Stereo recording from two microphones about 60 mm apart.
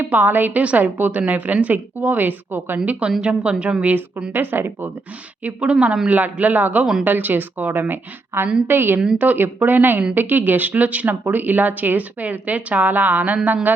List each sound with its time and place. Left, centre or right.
0.0 s a woman's voice: right
2.7 s a woman's voice: right
4.3 s a woman's voice: right
5.4 s a woman's voice: right